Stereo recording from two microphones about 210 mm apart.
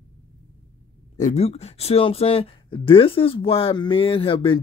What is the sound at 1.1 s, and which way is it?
Speech, 35° left (ahead or behind).